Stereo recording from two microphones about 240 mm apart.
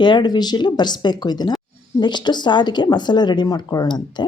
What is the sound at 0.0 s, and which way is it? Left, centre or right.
Speech, centre.